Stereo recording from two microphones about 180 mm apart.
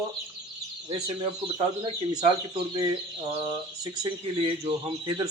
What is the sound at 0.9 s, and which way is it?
Speech, 30° right (ahead or behind).